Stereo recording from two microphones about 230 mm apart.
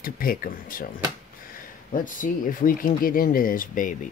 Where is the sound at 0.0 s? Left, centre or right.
Left.